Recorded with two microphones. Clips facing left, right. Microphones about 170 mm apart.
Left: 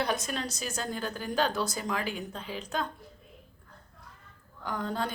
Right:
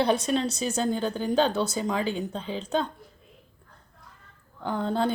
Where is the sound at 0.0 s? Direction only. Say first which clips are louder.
Right 8 dB; 30° right (ahead or behind).